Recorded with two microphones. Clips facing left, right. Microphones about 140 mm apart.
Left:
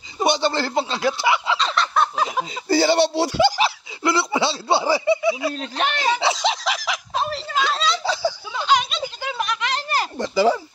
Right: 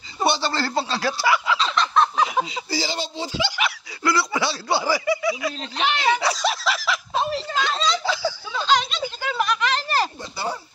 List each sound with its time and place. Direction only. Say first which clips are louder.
0.2 s speech: left 2 dB; 20° left (ahead or behind)
2.2 s snicker: left 1 dB; 50° left (ahead or behind); by 3.4 s 70° left (ahead or behind)
3.5 s snicker: left 4 dB; 30° left (ahead or behind)
5.5 s a sound: left 1 dB; 50° left (ahead or behind)
6.1 s snicker: left 2 dB; 20° left (ahead or behind)
7.2 s a sound: left 1 dB; centre (ahead or behind)
8.0 s a sound: left 2 dB; 25° left (ahead or behind)
8.7 s snicker: left 1 dB; 15° left (ahead or behind)
10.1 s children playing: left 11 dB; 85° left